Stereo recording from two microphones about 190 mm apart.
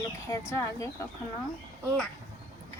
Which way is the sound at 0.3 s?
15° left (ahead or behind).